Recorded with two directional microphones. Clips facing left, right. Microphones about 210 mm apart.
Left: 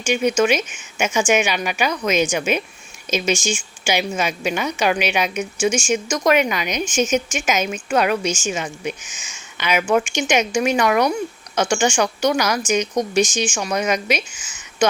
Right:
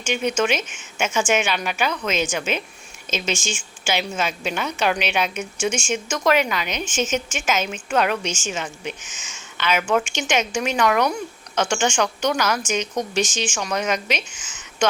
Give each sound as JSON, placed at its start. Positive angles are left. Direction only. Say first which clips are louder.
{"t": 0.0, "sound": "a woman's voice", "louder": "left 4 dB", "side_deg": 10}